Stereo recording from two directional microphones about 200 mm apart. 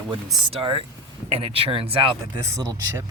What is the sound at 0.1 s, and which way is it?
Speech, 25° right (ahead or behind).